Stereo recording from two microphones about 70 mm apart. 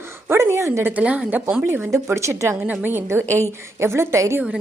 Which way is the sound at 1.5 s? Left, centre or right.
Right.